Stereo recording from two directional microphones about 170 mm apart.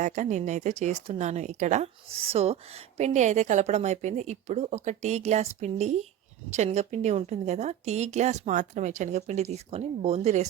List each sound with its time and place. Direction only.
0.0 s speech: 45° right (ahead or behind)